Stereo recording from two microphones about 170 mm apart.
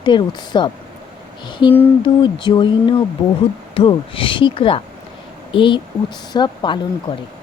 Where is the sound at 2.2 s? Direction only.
30° left (ahead or behind).